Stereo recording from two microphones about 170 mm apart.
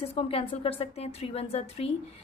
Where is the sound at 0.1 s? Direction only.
35° left (ahead or behind).